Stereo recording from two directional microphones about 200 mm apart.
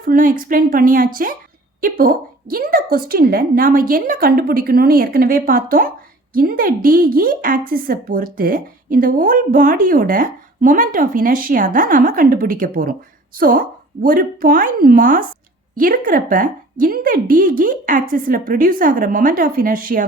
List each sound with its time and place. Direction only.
0.0 s a woman's voice: 45° right (ahead or behind)